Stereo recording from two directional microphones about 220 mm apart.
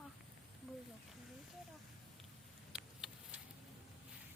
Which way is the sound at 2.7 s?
5° right (ahead or behind).